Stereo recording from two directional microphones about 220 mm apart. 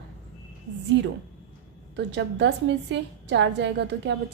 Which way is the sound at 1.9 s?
55° right (ahead or behind).